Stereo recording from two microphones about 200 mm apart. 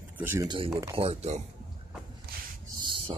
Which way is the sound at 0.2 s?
10° right (ahead or behind).